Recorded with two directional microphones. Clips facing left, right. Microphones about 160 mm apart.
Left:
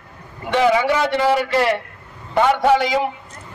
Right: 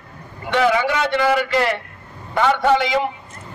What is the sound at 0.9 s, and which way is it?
Speech, 35° left (ahead or behind).